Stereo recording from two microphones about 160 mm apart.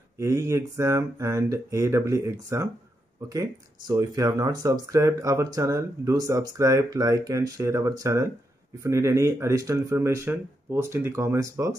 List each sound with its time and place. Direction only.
0.2 s speech: 20° right (ahead or behind)